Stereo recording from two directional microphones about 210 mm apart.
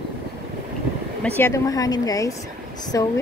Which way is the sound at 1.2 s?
10° left (ahead or behind).